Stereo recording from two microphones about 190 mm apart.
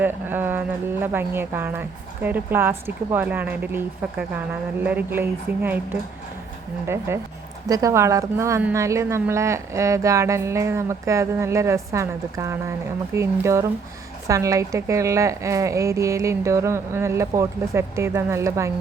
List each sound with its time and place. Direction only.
0.0 s a woman's voice: 10° right (ahead or behind)